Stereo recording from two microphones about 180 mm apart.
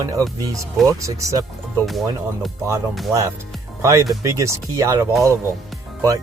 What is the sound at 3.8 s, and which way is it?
Speech, 15° right (ahead or behind).